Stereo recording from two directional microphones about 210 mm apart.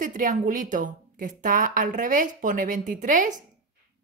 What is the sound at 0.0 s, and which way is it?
A woman's voice, 40° right (ahead or behind).